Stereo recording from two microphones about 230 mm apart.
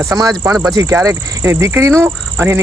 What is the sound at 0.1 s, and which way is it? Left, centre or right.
Speech, centre.